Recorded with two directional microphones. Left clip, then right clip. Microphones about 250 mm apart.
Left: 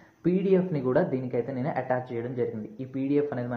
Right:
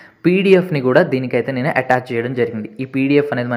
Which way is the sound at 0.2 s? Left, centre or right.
Right.